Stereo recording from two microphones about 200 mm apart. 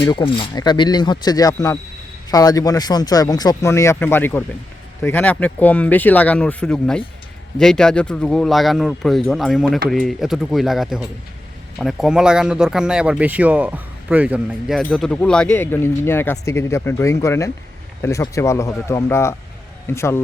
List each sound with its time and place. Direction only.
0.0 s speech: 25° left (ahead or behind)